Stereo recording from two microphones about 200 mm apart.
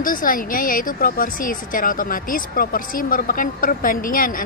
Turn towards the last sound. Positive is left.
turn(degrees=45)  # may be behind; listen again after turning